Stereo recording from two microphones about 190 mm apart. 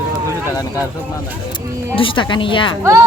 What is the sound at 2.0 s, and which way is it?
Speech, 25° left (ahead or behind).